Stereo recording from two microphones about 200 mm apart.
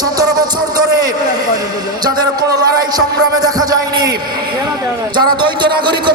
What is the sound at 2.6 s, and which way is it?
A man's voice, 20° right (ahead or behind).